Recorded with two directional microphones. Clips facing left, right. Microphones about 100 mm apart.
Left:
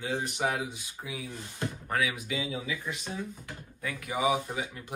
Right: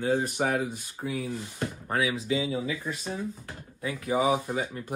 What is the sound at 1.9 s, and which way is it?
Speech, 30° right (ahead or behind).